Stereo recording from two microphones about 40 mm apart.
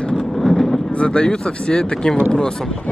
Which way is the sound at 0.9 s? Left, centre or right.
Left.